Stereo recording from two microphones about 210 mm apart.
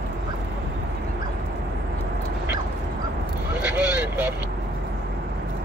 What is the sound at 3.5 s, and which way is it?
Vehicle, 10° right (ahead or behind).